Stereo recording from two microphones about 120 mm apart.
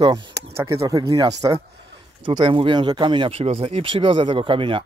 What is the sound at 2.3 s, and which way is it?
Speech, 45° right (ahead or behind).